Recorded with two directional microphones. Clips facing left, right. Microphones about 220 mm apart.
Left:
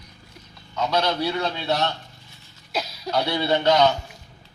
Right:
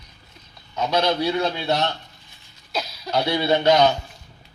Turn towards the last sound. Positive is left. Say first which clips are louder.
# right 2 dB
turn(degrees=-15)  # may be behind; listen again after turning